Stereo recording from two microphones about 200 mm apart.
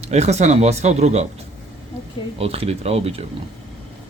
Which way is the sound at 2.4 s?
30° right (ahead or behind).